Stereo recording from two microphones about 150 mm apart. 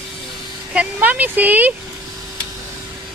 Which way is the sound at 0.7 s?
10° right (ahead or behind).